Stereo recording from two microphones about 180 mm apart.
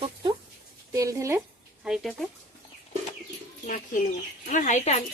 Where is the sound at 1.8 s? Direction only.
Centre (ahead or behind).